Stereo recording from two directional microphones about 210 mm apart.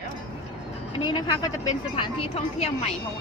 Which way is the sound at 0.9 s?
20° left (ahead or behind).